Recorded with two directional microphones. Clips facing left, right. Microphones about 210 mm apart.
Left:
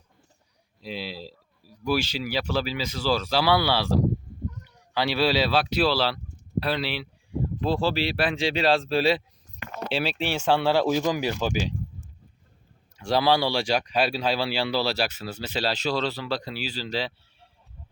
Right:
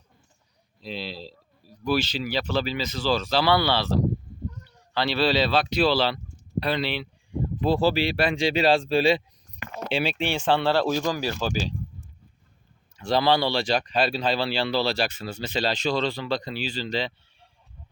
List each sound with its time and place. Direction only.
0.8 s speech: 10° left (ahead or behind)
6.6 s a sound: 5° left (ahead or behind)
7.7 s speech: 5° right (ahead or behind); by 11.7 s 15° left (ahead or behind)
13.0 s speech: 10° left (ahead or behind)